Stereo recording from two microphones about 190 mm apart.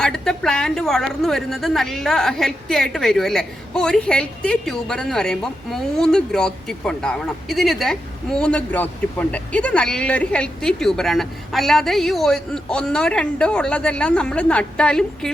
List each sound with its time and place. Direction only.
0.0 s a woman's voice: 5° left (ahead or behind)